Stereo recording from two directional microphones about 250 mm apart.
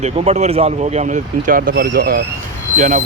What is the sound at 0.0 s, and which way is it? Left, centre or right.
Speech, right.